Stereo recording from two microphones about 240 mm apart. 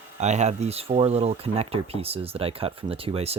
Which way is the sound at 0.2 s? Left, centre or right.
Right.